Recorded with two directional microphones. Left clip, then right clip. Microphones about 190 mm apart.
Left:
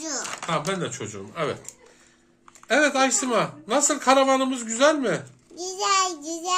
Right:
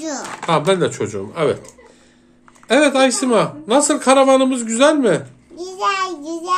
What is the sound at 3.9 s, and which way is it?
Speech, 25° right (ahead or behind).